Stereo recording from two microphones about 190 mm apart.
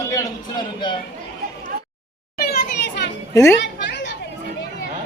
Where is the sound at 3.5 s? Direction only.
65° left (ahead or behind).